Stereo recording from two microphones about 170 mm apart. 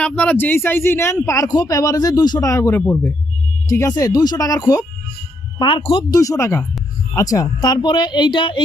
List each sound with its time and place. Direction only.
0.0 s speech: 10° left (ahead or behind); by 8.6 s 30° left (ahead or behind)